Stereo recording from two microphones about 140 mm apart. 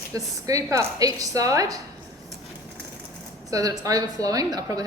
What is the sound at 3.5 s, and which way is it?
A woman's voice, 25° right (ahead or behind).